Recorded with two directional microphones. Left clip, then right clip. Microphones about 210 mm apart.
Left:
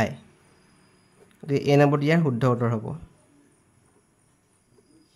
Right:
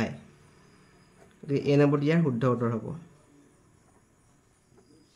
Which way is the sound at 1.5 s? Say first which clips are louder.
Left 4 dB; 35° left (ahead or behind).